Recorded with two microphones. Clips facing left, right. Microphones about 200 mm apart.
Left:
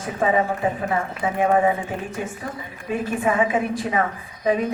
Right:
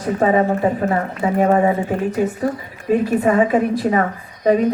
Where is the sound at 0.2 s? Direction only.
45° right (ahead or behind).